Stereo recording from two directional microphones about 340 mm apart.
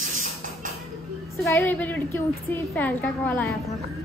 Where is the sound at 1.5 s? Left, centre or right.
Centre.